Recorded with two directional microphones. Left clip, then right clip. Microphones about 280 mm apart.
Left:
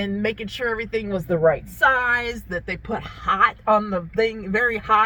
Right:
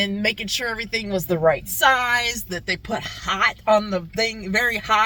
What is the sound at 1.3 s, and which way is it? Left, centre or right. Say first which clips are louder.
Speech: left 1 dB; right.